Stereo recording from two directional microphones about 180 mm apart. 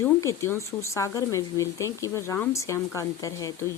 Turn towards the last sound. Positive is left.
turn(degrees=20)  # may be behind; listen again after turning